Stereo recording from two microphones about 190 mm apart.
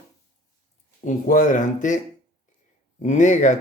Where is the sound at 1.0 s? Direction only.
45° left (ahead or behind).